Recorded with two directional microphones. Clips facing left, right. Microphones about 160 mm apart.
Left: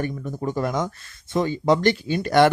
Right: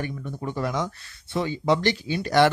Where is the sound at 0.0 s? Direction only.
40° left (ahead or behind).